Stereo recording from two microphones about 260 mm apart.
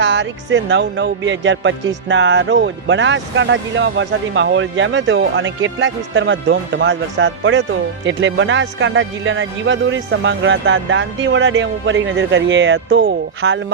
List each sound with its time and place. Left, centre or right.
0.0 s a man's voice: right